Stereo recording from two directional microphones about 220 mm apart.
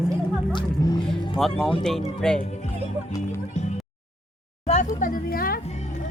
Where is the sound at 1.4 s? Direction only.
Centre (ahead or behind).